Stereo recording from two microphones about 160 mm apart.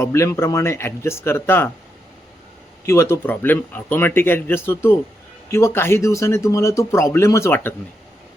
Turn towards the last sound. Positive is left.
turn(degrees=15)  # may be behind; listen again after turning